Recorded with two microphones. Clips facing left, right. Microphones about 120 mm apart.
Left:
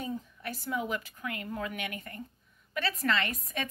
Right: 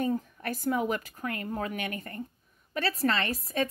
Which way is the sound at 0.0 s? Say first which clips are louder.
Right 7 dB; 50° right (ahead or behind).